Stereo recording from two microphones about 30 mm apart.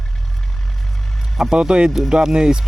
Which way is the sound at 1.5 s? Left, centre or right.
Right.